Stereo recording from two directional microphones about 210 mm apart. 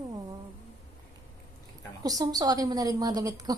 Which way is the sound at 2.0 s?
15° right (ahead or behind).